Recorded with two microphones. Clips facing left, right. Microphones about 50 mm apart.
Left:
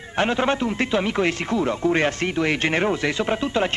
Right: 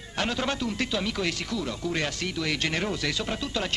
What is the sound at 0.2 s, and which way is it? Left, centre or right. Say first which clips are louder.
Speech: left 7 dB; left.